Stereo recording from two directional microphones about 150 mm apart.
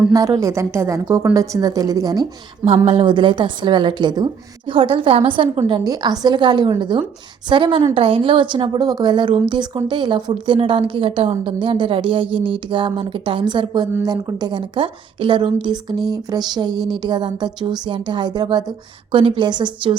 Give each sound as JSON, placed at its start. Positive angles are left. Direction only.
{"t": 0.1, "sound": "a woman's voice", "side_deg": -20}
{"t": 2.6, "sound": "a woman's voice", "side_deg": -40}